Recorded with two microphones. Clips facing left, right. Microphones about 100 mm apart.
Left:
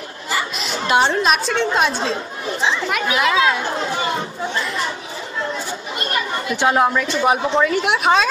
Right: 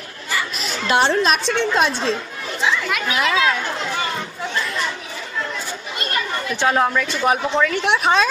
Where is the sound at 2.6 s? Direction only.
25° left (ahead or behind).